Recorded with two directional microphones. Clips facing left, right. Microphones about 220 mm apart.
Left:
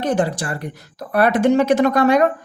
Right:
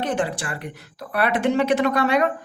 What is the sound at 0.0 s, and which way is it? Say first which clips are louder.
Speech: left 5 dB; 40° left (ahead or behind).